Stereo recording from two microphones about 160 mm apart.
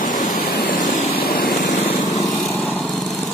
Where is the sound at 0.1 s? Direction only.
65° left (ahead or behind).